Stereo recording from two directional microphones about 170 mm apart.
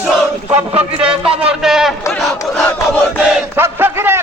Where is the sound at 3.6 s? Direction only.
15° right (ahead or behind).